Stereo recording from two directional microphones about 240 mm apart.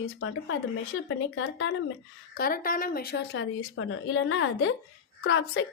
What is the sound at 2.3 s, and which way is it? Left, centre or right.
A woman's voice, left.